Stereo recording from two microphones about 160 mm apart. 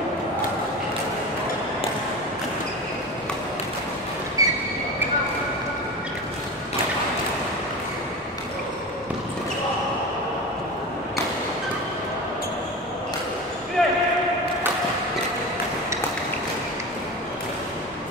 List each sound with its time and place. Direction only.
4.4 s train: 20° right (ahead or behind)
13.8 s basketball bounce: 5° left (ahead or behind)